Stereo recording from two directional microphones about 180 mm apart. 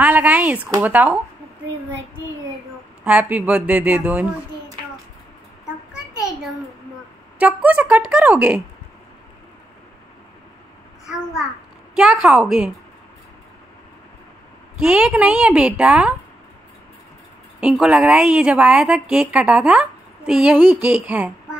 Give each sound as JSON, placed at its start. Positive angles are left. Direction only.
{"t": 0.0, "sound": "speech", "side_deg": -10}
{"t": 3.0, "sound": "speech", "side_deg": -5}
{"t": 7.3, "sound": "speech", "side_deg": -10}
{"t": 11.9, "sound": "a woman's voice", "side_deg": -5}
{"t": 14.8, "sound": "speech", "side_deg": -5}
{"t": 17.6, "sound": "a woman's voice", "side_deg": -5}